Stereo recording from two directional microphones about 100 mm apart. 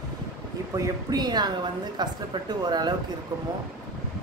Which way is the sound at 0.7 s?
35° right (ahead or behind).